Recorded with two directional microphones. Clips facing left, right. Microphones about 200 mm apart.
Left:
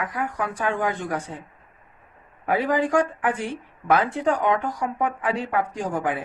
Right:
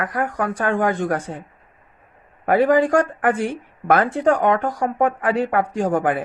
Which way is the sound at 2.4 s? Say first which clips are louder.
Right 7 dB; 50° right (ahead or behind).